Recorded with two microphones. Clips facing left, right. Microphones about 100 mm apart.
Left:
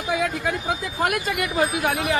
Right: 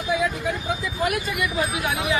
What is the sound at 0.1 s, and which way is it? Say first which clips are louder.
Speech: even; 70° left (ahead or behind).